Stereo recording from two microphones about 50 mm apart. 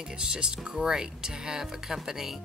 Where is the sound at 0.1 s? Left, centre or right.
Centre.